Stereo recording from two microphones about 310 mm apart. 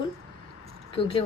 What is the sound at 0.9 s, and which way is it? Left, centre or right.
Speech, centre.